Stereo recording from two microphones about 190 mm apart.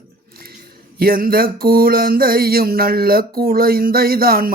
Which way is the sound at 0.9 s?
50° right (ahead or behind).